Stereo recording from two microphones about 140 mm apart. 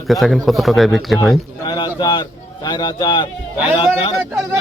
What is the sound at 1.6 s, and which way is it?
A man's voice, 30° left (ahead or behind).